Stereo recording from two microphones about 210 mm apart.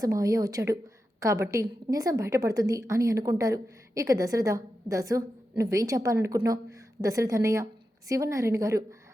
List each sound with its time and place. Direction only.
0.0 s a woman's voice: 15° right (ahead or behind)